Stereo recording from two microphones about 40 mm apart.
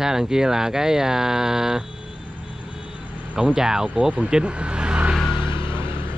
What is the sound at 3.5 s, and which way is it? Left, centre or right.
Speech, centre.